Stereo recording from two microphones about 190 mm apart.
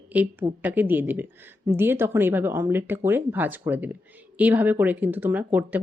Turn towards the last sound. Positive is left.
turn(degrees=-10)  # may be behind; listen again after turning